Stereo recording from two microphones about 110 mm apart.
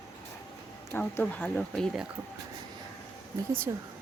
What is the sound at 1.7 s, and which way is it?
Speech, 5° left (ahead or behind).